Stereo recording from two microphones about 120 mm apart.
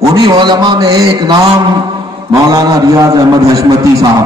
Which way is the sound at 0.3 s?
35° right (ahead or behind).